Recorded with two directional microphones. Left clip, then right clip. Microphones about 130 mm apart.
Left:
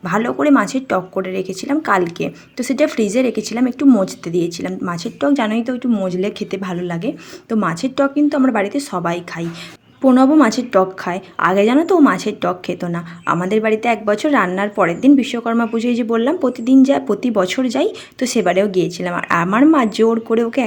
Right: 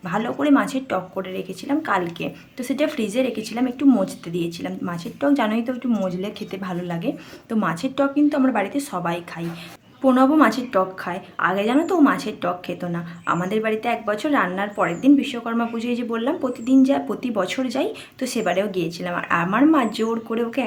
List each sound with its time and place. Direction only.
0.0 s a woman's voice: 35° left (ahead or behind)
4.8 s a woman's voice: 30° left (ahead or behind)